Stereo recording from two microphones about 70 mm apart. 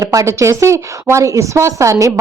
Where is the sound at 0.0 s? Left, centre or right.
Right.